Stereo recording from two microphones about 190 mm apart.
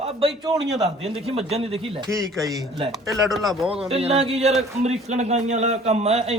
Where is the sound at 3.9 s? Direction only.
30° right (ahead or behind).